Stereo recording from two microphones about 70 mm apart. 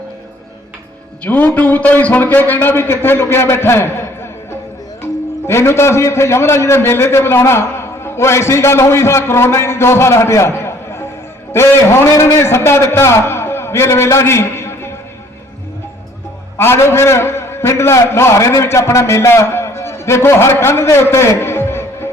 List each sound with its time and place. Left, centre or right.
1.2 s a man's voice: centre; by 4.3 s left
5.5 s a man's voice: left
16.6 s a man's voice: left